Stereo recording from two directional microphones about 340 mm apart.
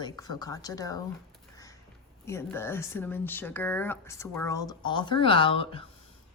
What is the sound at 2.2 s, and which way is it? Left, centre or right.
Speech, centre.